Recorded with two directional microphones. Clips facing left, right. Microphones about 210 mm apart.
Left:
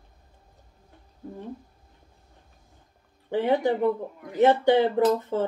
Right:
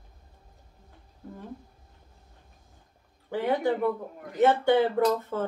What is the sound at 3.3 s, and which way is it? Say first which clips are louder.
Speech: left 3 dB; 15° left (ahead or behind).